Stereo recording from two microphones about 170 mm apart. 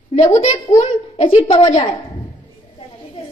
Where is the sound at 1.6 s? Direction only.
30° left (ahead or behind).